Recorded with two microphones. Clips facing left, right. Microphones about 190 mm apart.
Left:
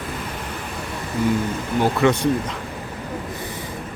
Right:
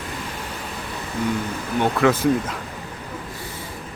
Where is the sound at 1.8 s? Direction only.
Centre (ahead or behind).